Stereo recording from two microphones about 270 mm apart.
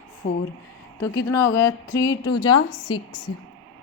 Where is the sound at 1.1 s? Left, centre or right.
Centre.